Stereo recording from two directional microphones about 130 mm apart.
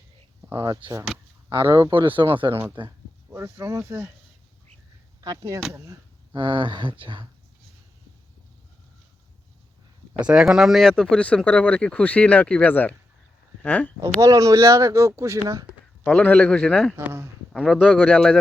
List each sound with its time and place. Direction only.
0.4 s speech: 25° right (ahead or behind)
1.9 s speech: 40° right (ahead or behind)
2.5 s speech: 15° right (ahead or behind)
5.2 s speech: 30° right (ahead or behind)
6.3 s speech: 40° right (ahead or behind)
10.2 s speech: 5° right (ahead or behind); by 13.9 s 10° left (ahead or behind)
14.2 s speech: 25° right (ahead or behind)
16.0 s speech: 10° left (ahead or behind)
16.9 s speech: 20° right (ahead or behind)
17.5 s speech: 5° left (ahead or behind)